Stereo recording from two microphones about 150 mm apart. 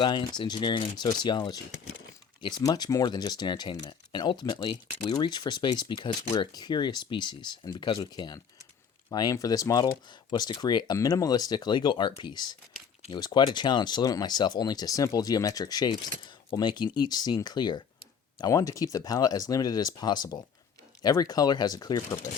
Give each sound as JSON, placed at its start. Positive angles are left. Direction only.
{"t": 0.0, "sound": "speech", "side_deg": 30}